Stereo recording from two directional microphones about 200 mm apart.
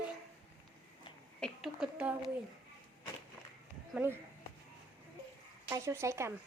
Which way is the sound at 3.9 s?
10° right (ahead or behind).